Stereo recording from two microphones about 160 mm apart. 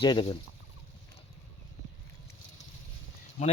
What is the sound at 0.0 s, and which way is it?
Speech, 30° left (ahead or behind).